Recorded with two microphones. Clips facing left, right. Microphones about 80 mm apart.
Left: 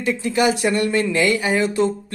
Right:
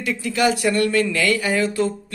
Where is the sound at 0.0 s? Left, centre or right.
Left.